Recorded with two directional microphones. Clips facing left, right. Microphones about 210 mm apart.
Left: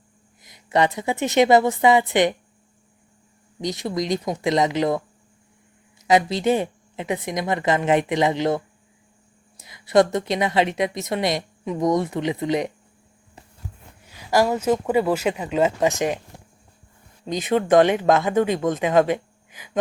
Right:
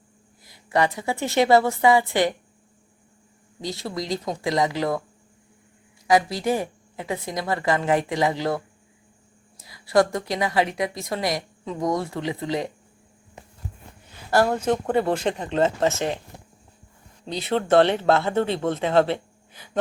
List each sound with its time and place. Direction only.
0.4 s a woman's voice: 20° left (ahead or behind)
3.6 s a woman's voice: 20° left (ahead or behind)
6.1 s a woman's voice: 20° left (ahead or behind)
14.1 s speech: 10° left (ahead or behind)
17.2 s speech: 15° left (ahead or behind)